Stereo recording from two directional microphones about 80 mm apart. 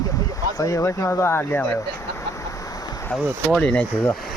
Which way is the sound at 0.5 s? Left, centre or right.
Left.